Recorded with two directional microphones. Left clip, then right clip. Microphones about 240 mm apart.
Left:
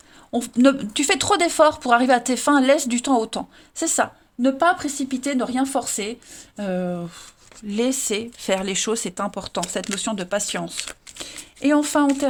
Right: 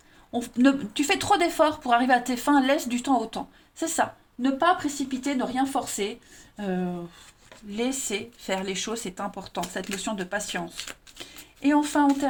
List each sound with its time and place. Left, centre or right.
0.3 s speech: left